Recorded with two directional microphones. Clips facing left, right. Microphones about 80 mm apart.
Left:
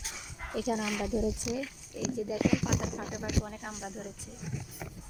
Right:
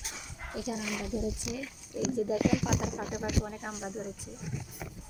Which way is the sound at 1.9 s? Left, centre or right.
Right.